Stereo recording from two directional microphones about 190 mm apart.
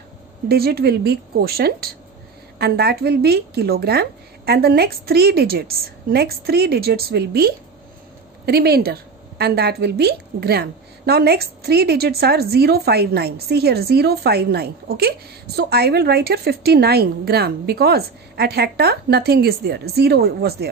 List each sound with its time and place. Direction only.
0.5 s a woman's voice: 55° right (ahead or behind)